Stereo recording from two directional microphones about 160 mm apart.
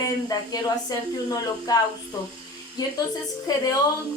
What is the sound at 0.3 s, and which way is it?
Speech, 25° left (ahead or behind).